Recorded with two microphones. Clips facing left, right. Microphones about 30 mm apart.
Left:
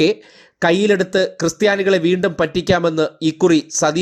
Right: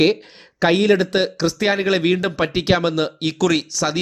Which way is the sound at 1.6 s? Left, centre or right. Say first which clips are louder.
Left 5 dB; right.